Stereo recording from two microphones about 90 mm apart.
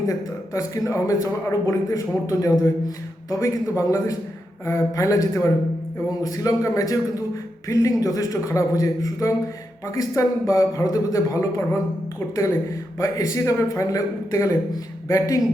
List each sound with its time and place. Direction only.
0.1 s speech: 35° left (ahead or behind)
13.0 s speech: 40° left (ahead or behind)